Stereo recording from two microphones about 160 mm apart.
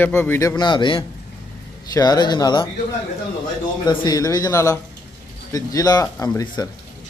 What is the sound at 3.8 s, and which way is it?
A man's voice, 25° left (ahead or behind).